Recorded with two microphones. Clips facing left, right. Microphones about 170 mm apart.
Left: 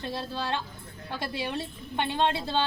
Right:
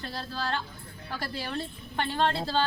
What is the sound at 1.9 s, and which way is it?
Speech, 20° left (ahead or behind).